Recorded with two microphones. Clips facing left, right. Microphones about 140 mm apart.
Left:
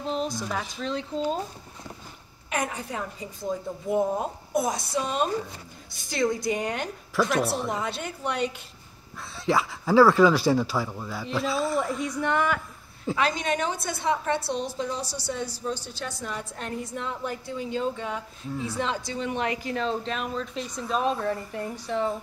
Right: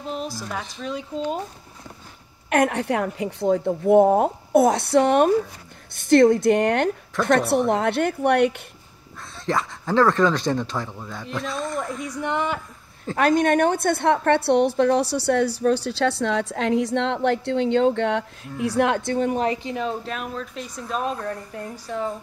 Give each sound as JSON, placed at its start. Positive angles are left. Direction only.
{"t": 0.0, "sound": "speech", "side_deg": -5}
{"t": 2.5, "sound": "a woman's voice", "side_deg": -65}
{"t": 9.5, "sound": "speech", "side_deg": 5}
{"t": 12.2, "sound": "speech", "side_deg": -20}
{"t": 13.1, "sound": "a woman's voice", "side_deg": -50}
{"t": 19.4, "sound": "speech", "side_deg": -30}
{"t": 19.7, "sound": "speech", "side_deg": -10}